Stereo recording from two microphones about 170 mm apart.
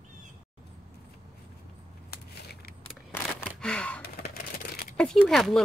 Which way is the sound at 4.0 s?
65° left (ahead or behind).